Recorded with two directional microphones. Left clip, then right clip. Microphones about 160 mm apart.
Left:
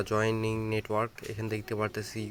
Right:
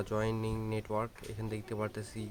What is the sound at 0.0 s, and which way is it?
Speech, 25° left (ahead or behind).